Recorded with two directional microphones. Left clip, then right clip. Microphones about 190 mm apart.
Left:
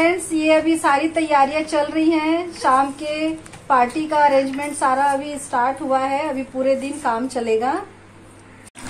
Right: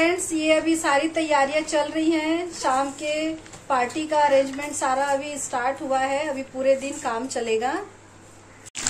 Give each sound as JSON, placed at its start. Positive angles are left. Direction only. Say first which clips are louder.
{"t": 0.0, "sound": "a woman's voice", "louder": "left 4 dB", "side_deg": 20}